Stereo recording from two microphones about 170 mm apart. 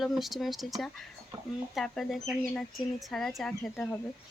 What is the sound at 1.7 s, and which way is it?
Speech, centre (ahead or behind).